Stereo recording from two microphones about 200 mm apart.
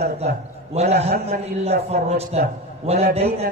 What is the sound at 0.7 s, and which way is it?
A man's voice, 30° right (ahead or behind).